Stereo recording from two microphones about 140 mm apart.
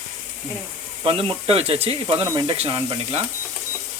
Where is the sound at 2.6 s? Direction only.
40° right (ahead or behind).